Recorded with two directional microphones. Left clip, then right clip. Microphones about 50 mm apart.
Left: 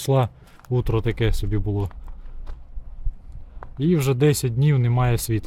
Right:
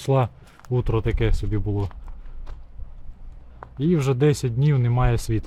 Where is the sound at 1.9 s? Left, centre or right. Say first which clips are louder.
Right 1 dB; centre.